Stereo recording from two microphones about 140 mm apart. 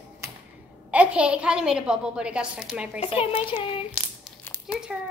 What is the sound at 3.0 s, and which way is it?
Speech, 40° left (ahead or behind).